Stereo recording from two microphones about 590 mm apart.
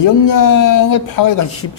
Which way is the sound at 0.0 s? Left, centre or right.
Left.